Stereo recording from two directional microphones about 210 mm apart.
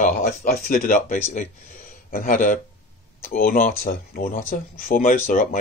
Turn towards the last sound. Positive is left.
turn(degrees=40)  # may be behind; listen again after turning